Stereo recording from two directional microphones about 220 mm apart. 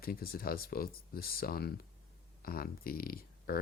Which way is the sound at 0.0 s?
45° left (ahead or behind).